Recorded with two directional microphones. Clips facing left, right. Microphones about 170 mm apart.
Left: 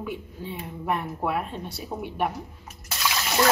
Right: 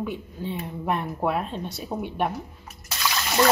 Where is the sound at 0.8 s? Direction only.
25° right (ahead or behind).